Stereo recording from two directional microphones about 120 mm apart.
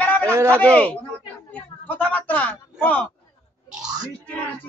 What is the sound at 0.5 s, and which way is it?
Speech, 10° left (ahead or behind).